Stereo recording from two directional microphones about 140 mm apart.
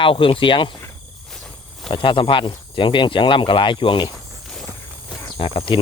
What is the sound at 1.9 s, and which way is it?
Speech, 35° left (ahead or behind).